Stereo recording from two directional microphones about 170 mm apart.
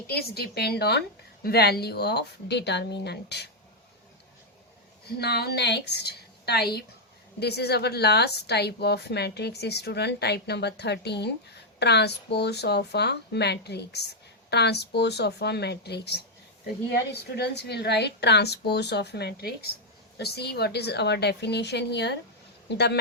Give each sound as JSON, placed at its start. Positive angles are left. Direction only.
{"t": 0.1, "sound": "a woman's voice", "side_deg": 65}
{"t": 5.0, "sound": "a woman's voice", "side_deg": 70}